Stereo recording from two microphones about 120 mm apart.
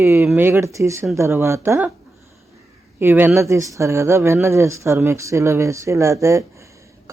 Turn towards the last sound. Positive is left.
turn(degrees=-25)  # may be behind; listen again after turning